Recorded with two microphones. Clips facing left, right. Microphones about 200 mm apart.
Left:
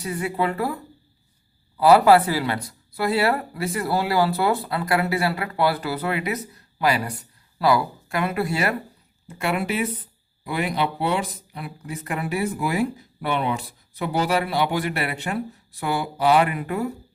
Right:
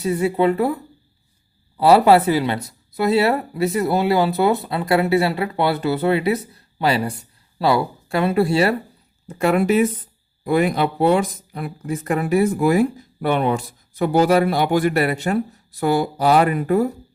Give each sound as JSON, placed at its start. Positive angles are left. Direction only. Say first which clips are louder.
{"t": 0.0, "sound": "speech", "louder": "right 7 dB", "side_deg": -25}
{"t": 1.8, "sound": "speech", "louder": "right 2 dB", "side_deg": -25}
{"t": 9.2, "sound": "speech", "louder": "right 8 dB", "side_deg": -40}